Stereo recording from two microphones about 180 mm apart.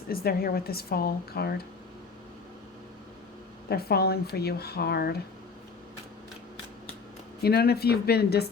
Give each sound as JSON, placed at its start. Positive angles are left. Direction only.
{"t": 0.1, "sound": "speech", "side_deg": 55}
{"t": 3.7, "sound": "speech", "side_deg": 60}
{"t": 7.4, "sound": "speech", "side_deg": 60}